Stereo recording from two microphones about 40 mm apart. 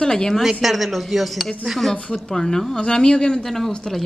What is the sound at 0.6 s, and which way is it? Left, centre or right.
Speech, centre.